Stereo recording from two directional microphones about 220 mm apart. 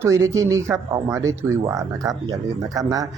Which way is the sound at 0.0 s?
15° right (ahead or behind).